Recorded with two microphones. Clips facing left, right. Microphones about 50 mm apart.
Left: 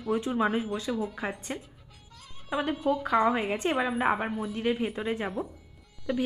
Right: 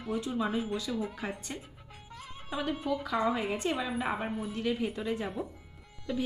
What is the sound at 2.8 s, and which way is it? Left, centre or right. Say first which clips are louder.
A woman's voice: left 7 dB; left.